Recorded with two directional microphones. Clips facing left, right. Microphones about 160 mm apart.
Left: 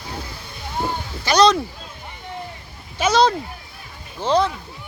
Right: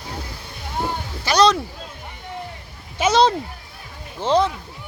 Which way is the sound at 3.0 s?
25° right (ahead or behind).